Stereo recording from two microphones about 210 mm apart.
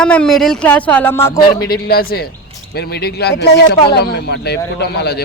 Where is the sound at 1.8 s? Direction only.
45° left (ahead or behind).